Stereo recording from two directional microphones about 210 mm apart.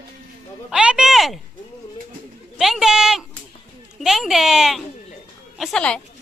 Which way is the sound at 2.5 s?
Centre (ahead or behind).